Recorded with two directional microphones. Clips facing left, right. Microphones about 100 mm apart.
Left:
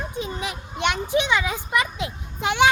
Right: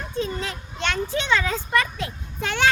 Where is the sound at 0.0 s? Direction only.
15° left (ahead or behind).